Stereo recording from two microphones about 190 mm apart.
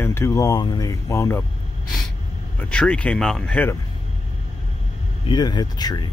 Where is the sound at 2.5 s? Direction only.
5° left (ahead or behind).